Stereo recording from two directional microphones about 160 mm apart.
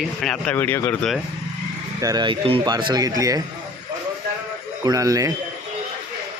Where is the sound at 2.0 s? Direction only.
25° right (ahead or behind).